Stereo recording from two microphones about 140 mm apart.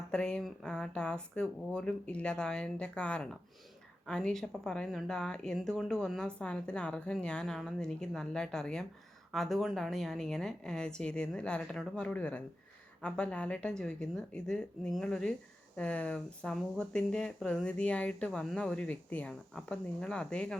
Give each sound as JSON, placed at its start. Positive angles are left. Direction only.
{"t": 0.1, "sound": "a woman's voice", "side_deg": 5}